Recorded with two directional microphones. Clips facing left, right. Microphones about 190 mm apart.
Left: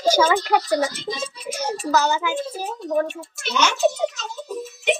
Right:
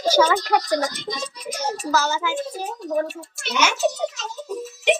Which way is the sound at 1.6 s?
15° left (ahead or behind).